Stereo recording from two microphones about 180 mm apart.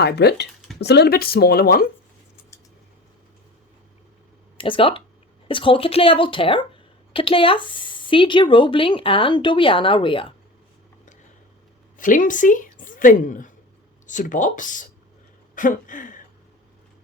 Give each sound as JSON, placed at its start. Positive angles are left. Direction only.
{"t": 0.0, "sound": "speech", "side_deg": 65}
{"t": 4.5, "sound": "speech", "side_deg": 30}
{"t": 11.9, "sound": "a woman's voice", "side_deg": 45}
{"t": 15.5, "sound": "a sound", "side_deg": 45}